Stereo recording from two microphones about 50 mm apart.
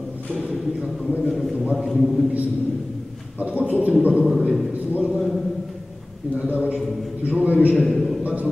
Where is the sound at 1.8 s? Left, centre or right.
Centre.